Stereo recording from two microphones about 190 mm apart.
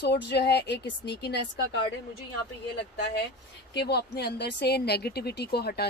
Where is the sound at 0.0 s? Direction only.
60° left (ahead or behind).